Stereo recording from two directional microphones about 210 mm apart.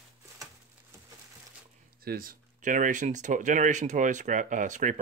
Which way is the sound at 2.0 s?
45° right (ahead or behind).